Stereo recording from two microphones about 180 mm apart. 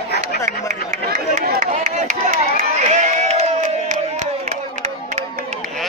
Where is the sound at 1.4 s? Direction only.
60° right (ahead or behind).